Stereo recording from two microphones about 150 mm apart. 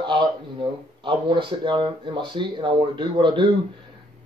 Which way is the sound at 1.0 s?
35° right (ahead or behind).